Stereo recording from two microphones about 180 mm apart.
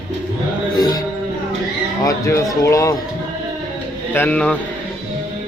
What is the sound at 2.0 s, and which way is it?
Speech, 20° left (ahead or behind).